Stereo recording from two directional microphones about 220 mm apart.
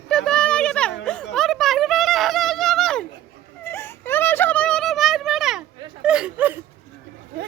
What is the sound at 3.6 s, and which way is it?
Whimper, 10° left (ahead or behind).